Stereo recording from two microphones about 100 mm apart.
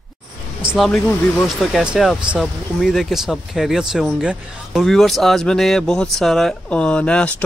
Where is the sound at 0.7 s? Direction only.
Centre (ahead or behind).